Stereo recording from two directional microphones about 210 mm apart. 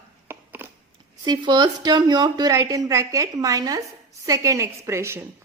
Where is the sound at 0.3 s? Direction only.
10° right (ahead or behind).